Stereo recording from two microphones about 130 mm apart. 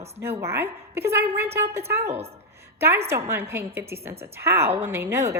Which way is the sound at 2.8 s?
20° right (ahead or behind).